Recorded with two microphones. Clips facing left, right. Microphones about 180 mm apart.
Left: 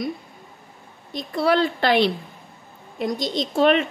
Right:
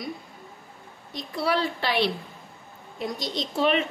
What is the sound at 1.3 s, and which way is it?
Speech, 55° left (ahead or behind).